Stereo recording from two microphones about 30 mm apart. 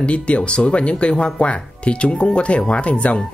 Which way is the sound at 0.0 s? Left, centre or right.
Left.